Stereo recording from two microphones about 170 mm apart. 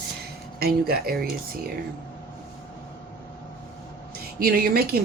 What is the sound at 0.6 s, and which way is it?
Speech, 65° right (ahead or behind).